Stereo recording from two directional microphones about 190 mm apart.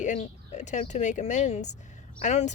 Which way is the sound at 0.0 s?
40° left (ahead or behind).